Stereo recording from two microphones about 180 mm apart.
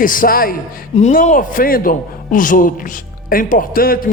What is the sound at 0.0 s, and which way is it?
Speech, 50° left (ahead or behind).